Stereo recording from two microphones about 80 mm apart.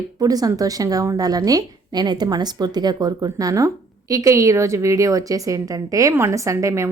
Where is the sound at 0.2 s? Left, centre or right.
Right.